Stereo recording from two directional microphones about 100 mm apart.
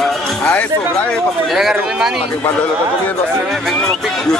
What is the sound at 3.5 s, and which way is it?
Speech, centre (ahead or behind).